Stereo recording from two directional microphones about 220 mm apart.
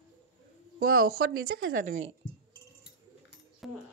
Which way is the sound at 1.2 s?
70° right (ahead or behind).